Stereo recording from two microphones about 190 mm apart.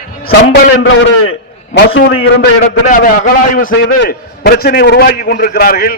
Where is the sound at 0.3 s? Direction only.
60° left (ahead or behind).